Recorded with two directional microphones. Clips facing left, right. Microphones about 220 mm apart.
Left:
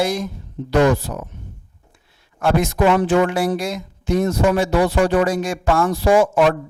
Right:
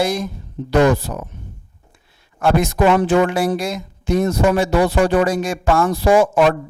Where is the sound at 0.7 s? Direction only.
30° right (ahead or behind).